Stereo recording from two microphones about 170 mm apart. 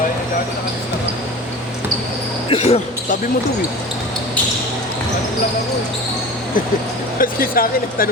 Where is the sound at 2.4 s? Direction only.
35° left (ahead or behind).